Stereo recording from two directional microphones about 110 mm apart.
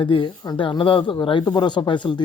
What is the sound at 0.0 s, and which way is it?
Speech, 50° left (ahead or behind).